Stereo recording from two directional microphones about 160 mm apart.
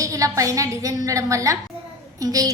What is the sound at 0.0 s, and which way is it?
A woman's voice, 20° right (ahead or behind).